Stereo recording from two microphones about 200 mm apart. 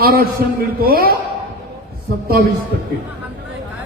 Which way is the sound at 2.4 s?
50° right (ahead or behind).